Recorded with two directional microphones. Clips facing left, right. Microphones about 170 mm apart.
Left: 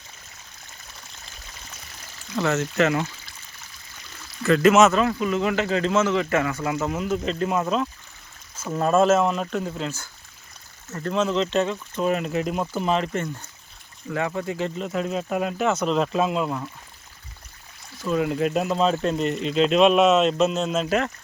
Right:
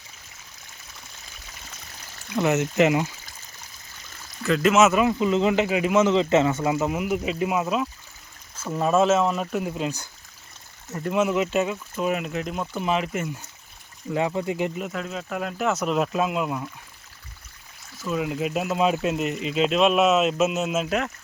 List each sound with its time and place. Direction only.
2.3 s speech: 15° right (ahead or behind)
4.4 s speech: centre (ahead or behind)
14.1 s speech: 20° right (ahead or behind)
14.9 s speech: 25° left (ahead or behind)
15.5 s speech: centre (ahead or behind)
18.0 s speech: 5° right (ahead or behind)